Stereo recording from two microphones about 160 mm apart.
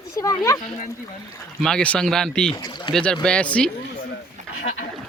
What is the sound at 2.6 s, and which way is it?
Speech, 25° left (ahead or behind).